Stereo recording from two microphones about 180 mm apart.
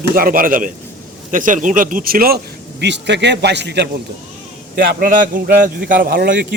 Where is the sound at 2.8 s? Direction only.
75° right (ahead or behind).